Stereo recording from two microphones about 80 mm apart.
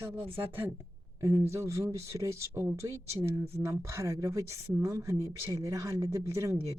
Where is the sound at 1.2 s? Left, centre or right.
Right.